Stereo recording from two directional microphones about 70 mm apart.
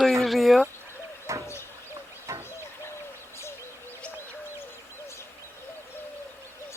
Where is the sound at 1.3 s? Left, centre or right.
Right.